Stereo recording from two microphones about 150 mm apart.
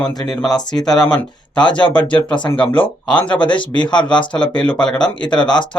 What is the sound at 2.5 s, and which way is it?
Speech, 10° left (ahead or behind).